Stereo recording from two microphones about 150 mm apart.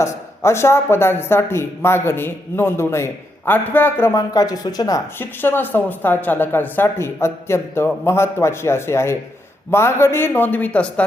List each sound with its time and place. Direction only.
0.0 s speech: 20° left (ahead or behind)